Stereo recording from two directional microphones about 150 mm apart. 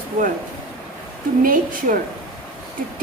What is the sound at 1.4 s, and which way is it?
Speech, 65° right (ahead or behind).